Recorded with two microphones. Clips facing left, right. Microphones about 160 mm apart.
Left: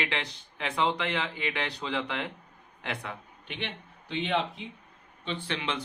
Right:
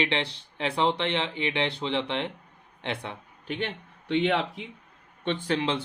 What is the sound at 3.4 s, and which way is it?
Speech, 40° right (ahead or behind).